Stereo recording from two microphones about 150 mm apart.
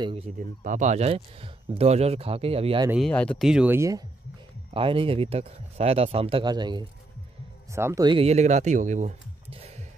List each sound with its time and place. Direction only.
0.0 s speech: 40° right (ahead or behind)
0.4 s speech: 60° right (ahead or behind); by 2.8 s 40° right (ahead or behind)
3.0 s speech: 5° left (ahead or behind)
3.4 s speech: 5° right (ahead or behind)
3.7 s speech: 20° right (ahead or behind)
4.7 s speech: 35° right (ahead or behind)
7.7 s speech: 20° right (ahead or behind)
8.1 s speech: 45° right (ahead or behind)